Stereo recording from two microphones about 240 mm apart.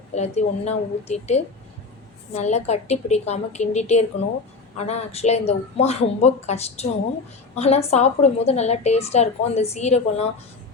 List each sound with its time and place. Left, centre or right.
0.1 s a woman's voice: left